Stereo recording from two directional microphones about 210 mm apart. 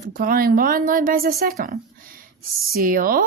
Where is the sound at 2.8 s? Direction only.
40° right (ahead or behind).